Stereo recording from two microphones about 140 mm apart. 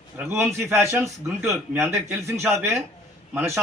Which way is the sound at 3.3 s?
15° right (ahead or behind).